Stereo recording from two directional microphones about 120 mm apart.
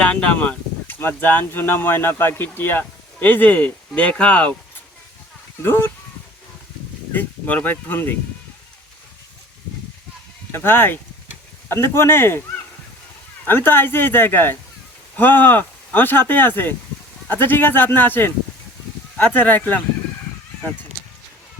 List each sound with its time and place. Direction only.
0.0 s speech: 10° left (ahead or behind)
5.6 s speech: 20° left (ahead or behind)
7.1 s speech: 15° left (ahead or behind)
10.5 s speech: 20° left (ahead or behind)
13.5 s speech: 15° left (ahead or behind)